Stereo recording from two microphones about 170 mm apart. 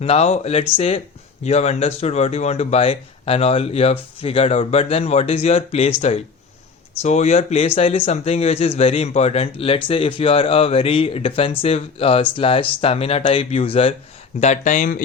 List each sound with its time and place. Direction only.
0.0 s a man's voice: 40° left (ahead or behind)
14.4 s speech: 45° left (ahead or behind)